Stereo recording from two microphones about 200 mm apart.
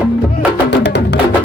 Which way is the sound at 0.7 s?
60° left (ahead or behind).